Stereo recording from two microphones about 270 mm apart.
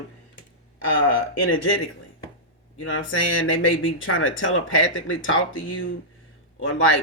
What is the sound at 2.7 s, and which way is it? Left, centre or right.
Speech, left.